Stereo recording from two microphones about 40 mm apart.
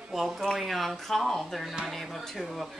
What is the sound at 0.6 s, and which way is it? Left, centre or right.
Speech, centre.